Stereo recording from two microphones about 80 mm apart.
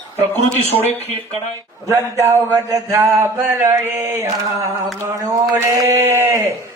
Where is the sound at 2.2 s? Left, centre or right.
Right.